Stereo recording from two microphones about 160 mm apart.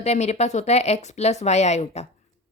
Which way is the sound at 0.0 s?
45° left (ahead or behind).